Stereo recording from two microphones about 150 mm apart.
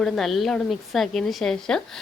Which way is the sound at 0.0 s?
Centre (ahead or behind).